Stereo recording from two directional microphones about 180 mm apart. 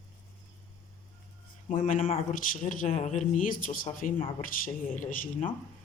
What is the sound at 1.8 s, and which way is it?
Speech, 40° left (ahead or behind).